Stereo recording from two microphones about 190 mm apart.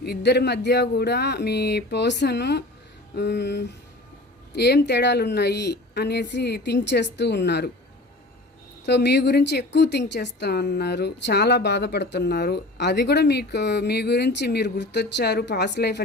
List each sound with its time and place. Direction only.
0.0 s a woman's voice: 60° left (ahead or behind)
8.9 s a woman's voice: 60° left (ahead or behind)